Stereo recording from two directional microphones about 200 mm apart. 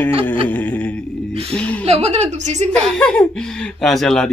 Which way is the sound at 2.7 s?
5° left (ahead or behind).